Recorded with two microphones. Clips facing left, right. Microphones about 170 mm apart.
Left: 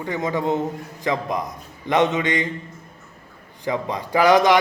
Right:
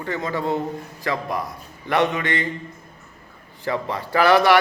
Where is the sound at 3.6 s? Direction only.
15° left (ahead or behind).